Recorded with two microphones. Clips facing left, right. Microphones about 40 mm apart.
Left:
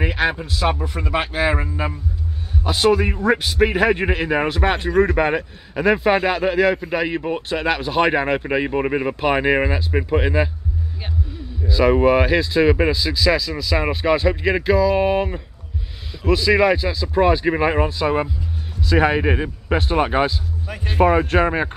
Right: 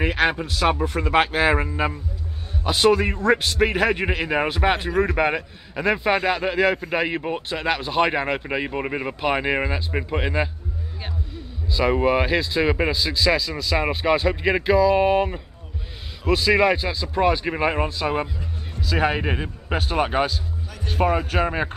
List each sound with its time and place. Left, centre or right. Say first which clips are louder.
0.1 s speech: even; centre
1.1 s speech: right 1 dB; centre
2.6 s speech: left 1 dB; centre
7.3 s speech: left 3 dB; centre
11.6 s speech: left 5 dB; centre
17.1 s speech: left 4 dB; centre
20.6 s speech: left 6 dB; left